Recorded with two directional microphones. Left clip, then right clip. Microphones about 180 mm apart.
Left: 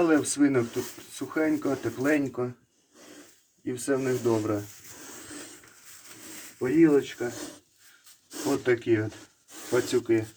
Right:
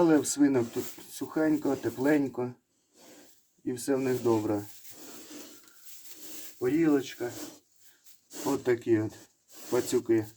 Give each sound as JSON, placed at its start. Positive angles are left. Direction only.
{"t": 0.0, "sound": "speech", "side_deg": -10}
{"t": 3.7, "sound": "speech", "side_deg": -5}
{"t": 6.6, "sound": "rub", "side_deg": 10}
{"t": 8.3, "sound": "a sound", "side_deg": -20}
{"t": 8.6, "sound": "speech", "side_deg": -5}